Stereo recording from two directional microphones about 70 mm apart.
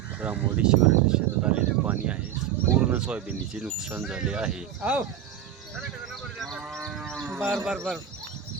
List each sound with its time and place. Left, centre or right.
0.2 s speech: right
6.4 s speech: centre
6.8 s livestock: centre
7.2 s speech: centre